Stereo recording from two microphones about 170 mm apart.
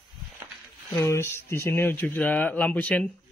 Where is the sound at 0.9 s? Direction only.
15° left (ahead or behind).